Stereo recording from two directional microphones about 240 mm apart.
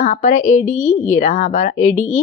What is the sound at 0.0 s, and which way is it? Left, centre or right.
A woman's voice, left.